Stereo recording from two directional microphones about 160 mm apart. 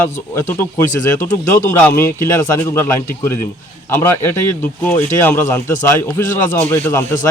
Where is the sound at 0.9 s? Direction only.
15° left (ahead or behind).